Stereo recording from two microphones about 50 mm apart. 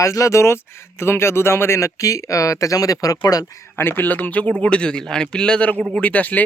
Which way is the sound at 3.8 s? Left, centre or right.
Left.